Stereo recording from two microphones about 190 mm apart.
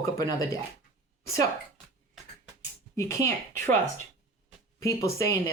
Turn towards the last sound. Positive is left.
turn(degrees=15)  # may be behind; listen again after turning